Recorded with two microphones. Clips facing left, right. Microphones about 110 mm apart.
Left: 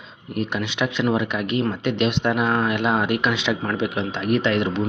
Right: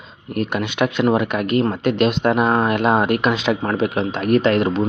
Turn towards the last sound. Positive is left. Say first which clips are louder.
# right 4 dB
turn(degrees=-45)  # may be behind; listen again after turning